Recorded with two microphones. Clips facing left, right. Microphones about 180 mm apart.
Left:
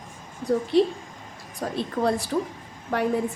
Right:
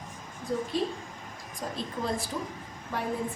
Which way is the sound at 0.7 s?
70° left (ahead or behind).